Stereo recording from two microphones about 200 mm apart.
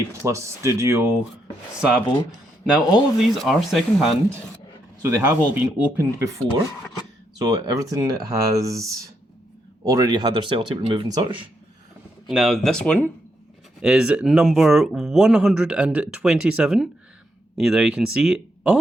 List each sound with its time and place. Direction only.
0.1 s speech: 15° right (ahead or behind)
2.6 s speech: centre (ahead or behind)
7.3 s speech: 20° right (ahead or behind)
9.8 s speech: 15° right (ahead or behind)
12.3 s speech: centre (ahead or behind)